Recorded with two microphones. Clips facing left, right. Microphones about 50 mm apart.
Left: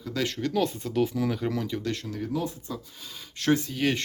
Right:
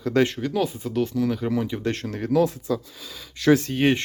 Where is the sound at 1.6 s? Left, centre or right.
Right.